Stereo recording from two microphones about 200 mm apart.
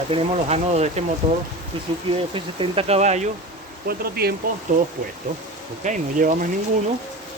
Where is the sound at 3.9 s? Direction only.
50° right (ahead or behind).